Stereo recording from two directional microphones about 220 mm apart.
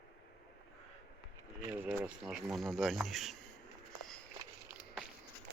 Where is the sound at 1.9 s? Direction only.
5° right (ahead or behind).